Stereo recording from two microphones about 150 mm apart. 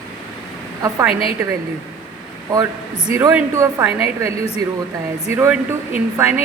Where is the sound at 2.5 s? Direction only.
20° right (ahead or behind).